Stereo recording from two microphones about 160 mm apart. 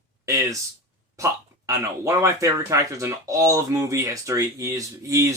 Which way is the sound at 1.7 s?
20° right (ahead or behind).